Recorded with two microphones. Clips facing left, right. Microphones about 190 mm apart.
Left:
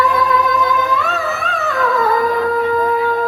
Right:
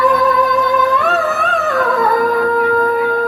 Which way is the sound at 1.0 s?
55° right (ahead or behind).